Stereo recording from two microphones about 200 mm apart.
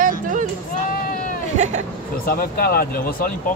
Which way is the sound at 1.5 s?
35° right (ahead or behind).